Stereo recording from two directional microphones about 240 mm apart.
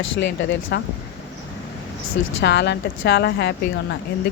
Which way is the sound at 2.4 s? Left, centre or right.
Left.